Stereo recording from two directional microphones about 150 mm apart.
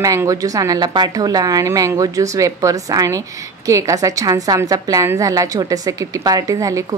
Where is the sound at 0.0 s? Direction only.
20° right (ahead or behind).